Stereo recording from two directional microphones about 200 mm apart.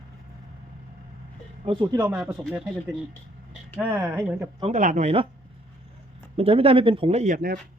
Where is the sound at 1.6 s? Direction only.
25° right (ahead or behind).